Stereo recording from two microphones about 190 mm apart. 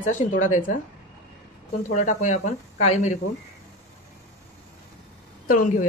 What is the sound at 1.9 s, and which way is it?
Speech, 40° left (ahead or behind).